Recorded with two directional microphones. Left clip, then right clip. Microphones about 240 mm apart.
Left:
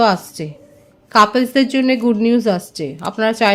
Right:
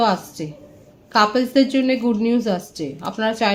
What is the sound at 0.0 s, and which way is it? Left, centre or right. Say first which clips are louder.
A woman's voice: left 4 dB; left.